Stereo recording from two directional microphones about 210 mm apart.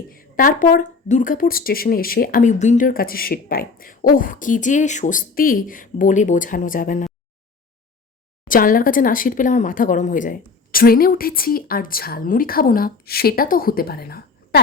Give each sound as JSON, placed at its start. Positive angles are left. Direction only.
{"t": 0.1, "sound": "speech", "side_deg": 40}
{"t": 8.4, "sound": "speech", "side_deg": 40}